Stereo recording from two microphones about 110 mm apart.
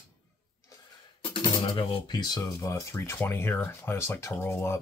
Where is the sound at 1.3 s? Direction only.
45° left (ahead or behind).